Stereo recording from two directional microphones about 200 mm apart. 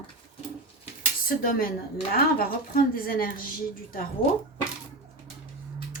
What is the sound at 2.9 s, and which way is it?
Speech, 45° left (ahead or behind).